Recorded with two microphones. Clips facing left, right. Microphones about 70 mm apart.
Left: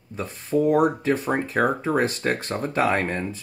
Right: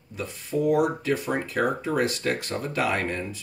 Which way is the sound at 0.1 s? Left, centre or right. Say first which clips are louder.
Left 5 dB; left.